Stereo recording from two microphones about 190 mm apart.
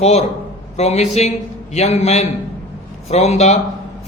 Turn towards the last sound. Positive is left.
turn(degrees=35)  # may be behind; listen again after turning